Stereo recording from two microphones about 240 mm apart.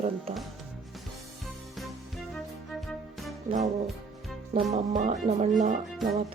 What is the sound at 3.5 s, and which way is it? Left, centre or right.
Speech, right.